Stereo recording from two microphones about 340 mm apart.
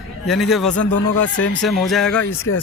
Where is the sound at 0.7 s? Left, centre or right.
Left.